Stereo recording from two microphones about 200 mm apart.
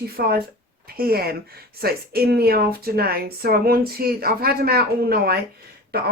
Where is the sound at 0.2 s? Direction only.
50° right (ahead or behind).